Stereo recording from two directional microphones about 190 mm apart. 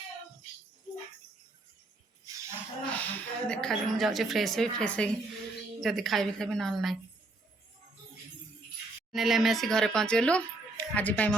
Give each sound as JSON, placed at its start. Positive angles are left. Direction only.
{"t": 2.3, "sound": "a sound", "side_deg": -20}
{"t": 3.0, "sound": "speech", "side_deg": 5}
{"t": 9.1, "sound": "speech", "side_deg": 0}